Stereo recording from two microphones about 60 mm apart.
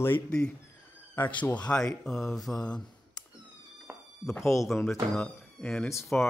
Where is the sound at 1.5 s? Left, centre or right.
Centre.